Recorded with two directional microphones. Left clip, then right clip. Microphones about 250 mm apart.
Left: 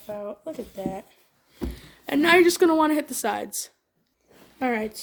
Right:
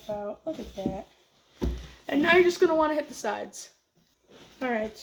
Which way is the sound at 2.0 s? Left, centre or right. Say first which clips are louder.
Left 3 dB; left.